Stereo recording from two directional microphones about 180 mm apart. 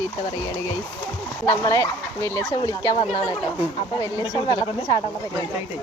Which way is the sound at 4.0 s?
20° left (ahead or behind).